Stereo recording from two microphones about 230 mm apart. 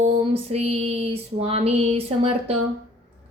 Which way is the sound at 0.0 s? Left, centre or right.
Right.